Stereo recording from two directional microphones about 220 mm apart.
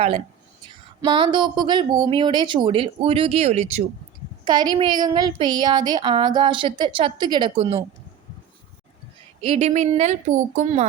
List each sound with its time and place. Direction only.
1.0 s a woman's voice: 20° right (ahead or behind)
4.4 s a woman's voice: 20° right (ahead or behind)
9.5 s a woman's voice: 30° right (ahead or behind)